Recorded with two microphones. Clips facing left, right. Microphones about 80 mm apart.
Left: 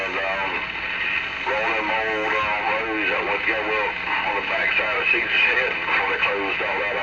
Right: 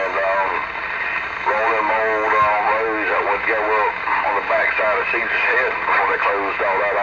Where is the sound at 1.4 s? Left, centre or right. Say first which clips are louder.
Right 6 dB; right.